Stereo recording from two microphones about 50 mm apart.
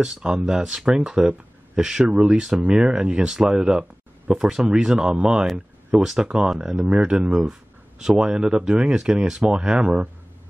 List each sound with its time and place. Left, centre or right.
0.0 s speech: centre
6.5 s speech: centre